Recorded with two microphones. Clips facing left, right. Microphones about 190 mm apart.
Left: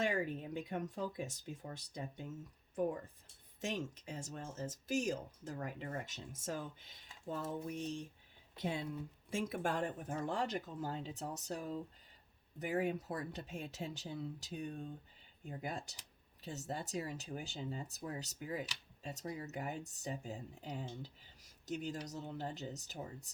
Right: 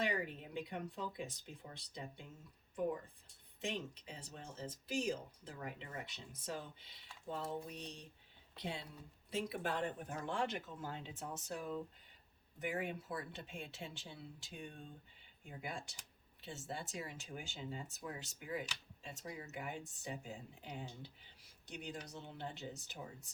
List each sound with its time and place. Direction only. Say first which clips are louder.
0.0 s speech: left 3 dB; 45° left (ahead or behind)
3.6 s speech: left 2 dB; 45° left (ahead or behind)